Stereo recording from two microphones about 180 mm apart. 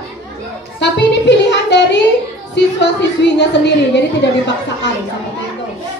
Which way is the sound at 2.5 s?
75° left (ahead or behind).